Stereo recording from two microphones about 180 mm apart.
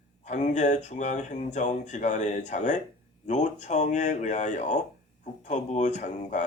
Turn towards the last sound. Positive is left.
turn(degrees=40)  # may be behind; listen again after turning